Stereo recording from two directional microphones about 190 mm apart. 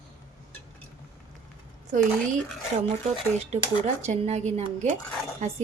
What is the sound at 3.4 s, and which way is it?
Speech, 35° right (ahead or behind).